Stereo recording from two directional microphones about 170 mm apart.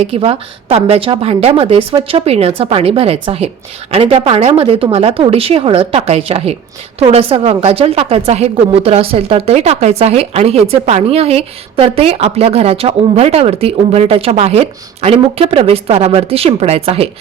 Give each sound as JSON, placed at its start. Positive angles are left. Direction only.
{"t": 0.0, "sound": "a woman's voice", "side_deg": -35}